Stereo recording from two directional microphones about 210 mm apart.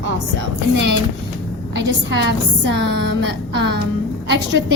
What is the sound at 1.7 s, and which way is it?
A woman's voice, 55° right (ahead or behind).